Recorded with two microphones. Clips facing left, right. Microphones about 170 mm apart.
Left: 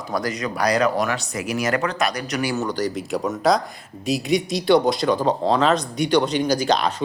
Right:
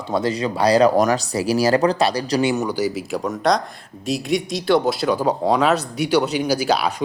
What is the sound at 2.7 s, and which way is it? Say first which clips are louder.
Speech: right 2 dB; 10° right (ahead or behind).